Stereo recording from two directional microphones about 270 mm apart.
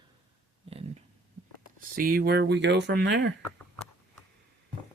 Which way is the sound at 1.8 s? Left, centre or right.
Right.